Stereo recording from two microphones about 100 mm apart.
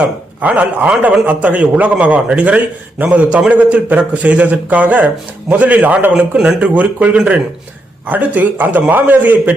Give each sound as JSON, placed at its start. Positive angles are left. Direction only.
{"t": 0.0, "sound": "a man's voice", "side_deg": -15}